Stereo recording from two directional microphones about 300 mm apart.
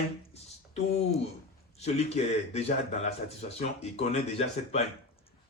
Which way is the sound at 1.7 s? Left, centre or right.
Left.